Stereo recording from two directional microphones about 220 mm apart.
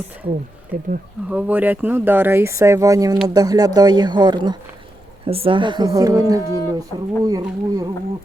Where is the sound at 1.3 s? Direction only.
10° right (ahead or behind).